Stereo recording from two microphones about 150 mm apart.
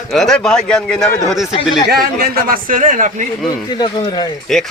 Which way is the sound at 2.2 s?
85° right.